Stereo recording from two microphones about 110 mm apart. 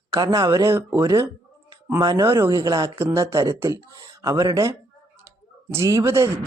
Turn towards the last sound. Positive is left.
turn(degrees=-25)  # may be behind; listen again after turning